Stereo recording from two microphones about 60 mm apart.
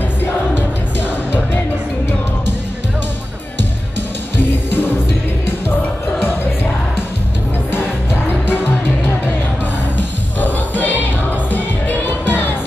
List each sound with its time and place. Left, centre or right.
4.4 s music: left
9.9 s music: left
12.1 s music: left